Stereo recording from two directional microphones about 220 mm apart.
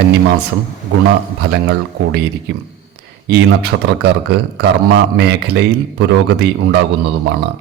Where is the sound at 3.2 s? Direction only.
50° right (ahead or behind).